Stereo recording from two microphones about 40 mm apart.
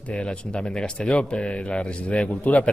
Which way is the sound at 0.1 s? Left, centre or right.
Left.